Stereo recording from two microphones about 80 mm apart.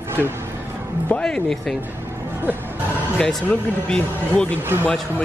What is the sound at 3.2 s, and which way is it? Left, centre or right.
Speech, centre.